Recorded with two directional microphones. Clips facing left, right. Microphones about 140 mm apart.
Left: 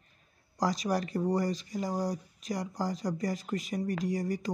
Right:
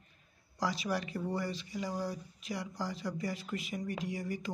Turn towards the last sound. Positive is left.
turn(degrees=40)  # may be behind; listen again after turning